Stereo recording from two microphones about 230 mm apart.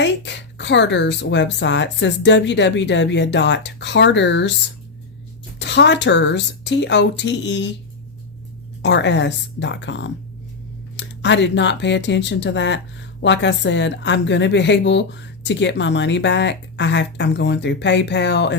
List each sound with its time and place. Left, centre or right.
0.0 s speech: left
5.5 s speech: left
8.8 s speech: left